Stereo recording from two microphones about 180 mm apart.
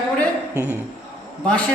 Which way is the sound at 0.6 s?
10° right (ahead or behind).